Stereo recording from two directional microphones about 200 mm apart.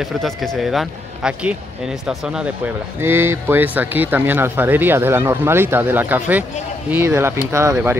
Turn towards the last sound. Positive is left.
turn(degrees=-15)  # may be behind; listen again after turning